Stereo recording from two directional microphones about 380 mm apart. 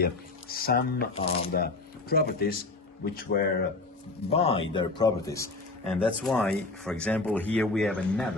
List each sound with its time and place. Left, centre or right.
0.0 s speech: left
4.3 s speech: centre